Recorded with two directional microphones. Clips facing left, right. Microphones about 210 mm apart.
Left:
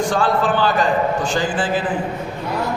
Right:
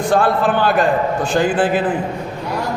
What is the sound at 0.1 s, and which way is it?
A man's voice, 60° right (ahead or behind).